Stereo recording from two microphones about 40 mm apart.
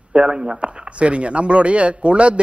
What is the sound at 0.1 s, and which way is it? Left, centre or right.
Speech, right.